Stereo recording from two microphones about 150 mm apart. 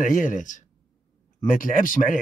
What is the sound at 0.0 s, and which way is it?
Speech, 60° left (ahead or behind).